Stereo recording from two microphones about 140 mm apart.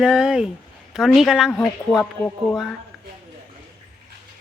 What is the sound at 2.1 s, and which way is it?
Speech, 15° left (ahead or behind).